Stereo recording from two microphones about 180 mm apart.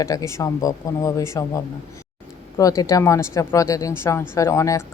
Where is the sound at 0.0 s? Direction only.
20° left (ahead or behind).